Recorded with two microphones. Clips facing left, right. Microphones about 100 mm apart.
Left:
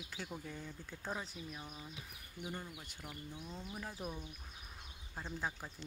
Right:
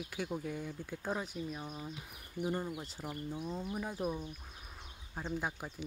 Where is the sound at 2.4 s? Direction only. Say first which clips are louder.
Right 9 dB; 35° right (ahead or behind).